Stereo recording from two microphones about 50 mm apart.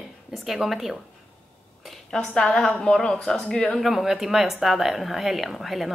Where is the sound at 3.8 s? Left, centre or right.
Centre.